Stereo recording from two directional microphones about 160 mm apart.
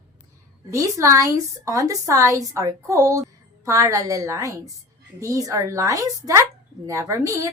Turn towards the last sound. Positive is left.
turn(degrees=-20)  # may be behind; listen again after turning